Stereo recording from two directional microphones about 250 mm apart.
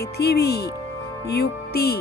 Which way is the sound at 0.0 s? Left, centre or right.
Left.